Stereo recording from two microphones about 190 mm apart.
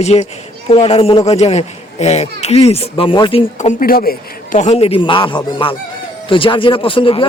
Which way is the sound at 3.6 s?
45° left (ahead or behind).